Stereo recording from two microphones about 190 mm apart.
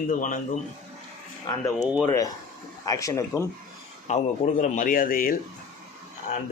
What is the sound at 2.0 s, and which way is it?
Speech, 15° left (ahead or behind).